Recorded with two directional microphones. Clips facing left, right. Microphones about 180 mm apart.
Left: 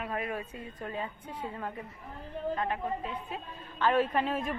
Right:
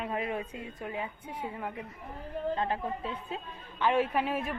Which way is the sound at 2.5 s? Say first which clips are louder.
Even; 30° right (ahead or behind).